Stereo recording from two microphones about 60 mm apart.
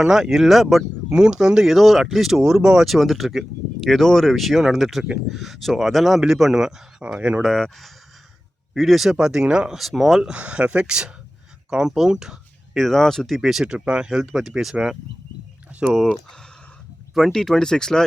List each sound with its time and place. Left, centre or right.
0.0 s speech: centre
1.1 s speech: centre
2.8 s speech: centre
7.2 s speech: centre
7.4 s speech: centre
9.1 s speech: centre
9.7 s speech: centre
10.3 s speech: right
12.7 s speech: centre
13.7 s speech: centre
15.7 s a sound: centre
17.2 s speech: centre